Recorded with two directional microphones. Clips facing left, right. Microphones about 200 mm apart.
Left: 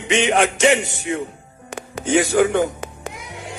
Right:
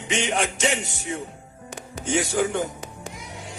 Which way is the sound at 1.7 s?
90° left.